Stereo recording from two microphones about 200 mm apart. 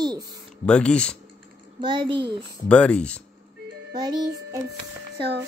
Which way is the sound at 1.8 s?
25° right (ahead or behind).